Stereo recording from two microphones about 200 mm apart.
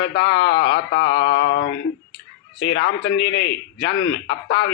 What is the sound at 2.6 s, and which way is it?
A man's voice, 60° left (ahead or behind).